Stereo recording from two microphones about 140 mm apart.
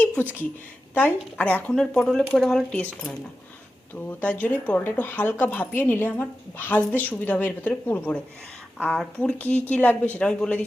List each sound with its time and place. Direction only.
0.9 s speech: 10° left (ahead or behind)